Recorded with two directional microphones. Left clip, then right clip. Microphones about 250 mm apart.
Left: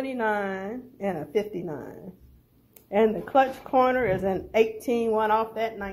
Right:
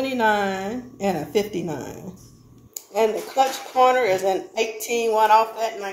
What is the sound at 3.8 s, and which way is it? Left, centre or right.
Speech, centre.